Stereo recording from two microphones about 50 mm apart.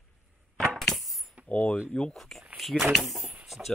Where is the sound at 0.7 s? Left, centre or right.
Centre.